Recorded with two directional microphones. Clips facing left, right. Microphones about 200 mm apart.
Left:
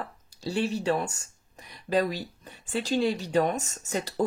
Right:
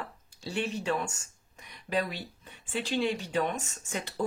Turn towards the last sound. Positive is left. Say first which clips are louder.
# left 5 dB
turn(degrees=35)  # may be behind; listen again after turning